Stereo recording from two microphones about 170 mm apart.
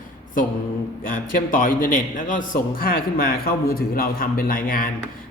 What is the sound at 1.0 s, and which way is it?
A man's voice, 55° left (ahead or behind).